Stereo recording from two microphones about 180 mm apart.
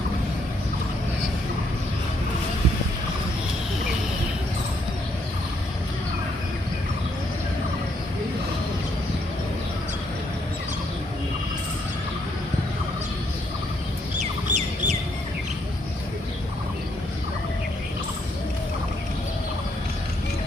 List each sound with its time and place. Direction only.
14.2 s fowl: 40° right (ahead or behind)